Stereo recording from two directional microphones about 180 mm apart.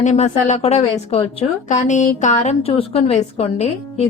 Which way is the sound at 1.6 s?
40° left (ahead or behind).